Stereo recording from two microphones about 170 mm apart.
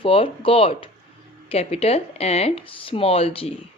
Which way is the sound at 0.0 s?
30° left (ahead or behind).